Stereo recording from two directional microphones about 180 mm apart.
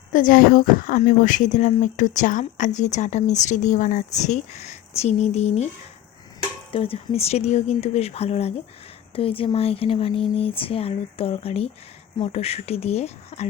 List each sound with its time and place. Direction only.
0.1 s speech: 50° left (ahead or behind)
6.7 s speech: 30° left (ahead or behind)